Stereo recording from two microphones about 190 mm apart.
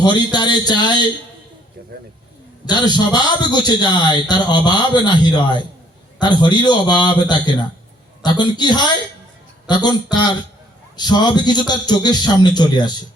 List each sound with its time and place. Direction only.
0.0 s a man's voice: 20° left (ahead or behind)
2.6 s a man's voice: 20° left (ahead or behind)